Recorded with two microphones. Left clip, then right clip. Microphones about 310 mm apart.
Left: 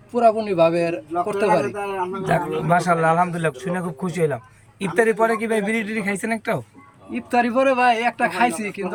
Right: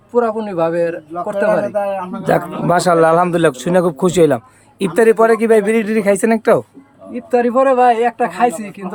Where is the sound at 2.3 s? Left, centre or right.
Centre.